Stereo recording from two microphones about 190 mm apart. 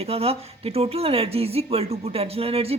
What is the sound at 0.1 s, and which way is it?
Speech, 30° right (ahead or behind).